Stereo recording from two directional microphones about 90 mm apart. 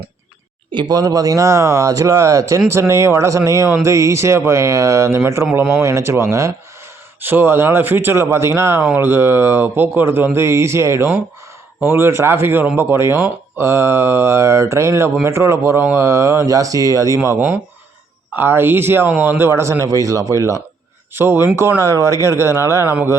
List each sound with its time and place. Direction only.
0.7 s speech: 65° right (ahead or behind)
0.9 s a man's voice: 45° right (ahead or behind)
17.3 s a man's voice: 25° right (ahead or behind)
21.1 s a man's voice: 25° right (ahead or behind)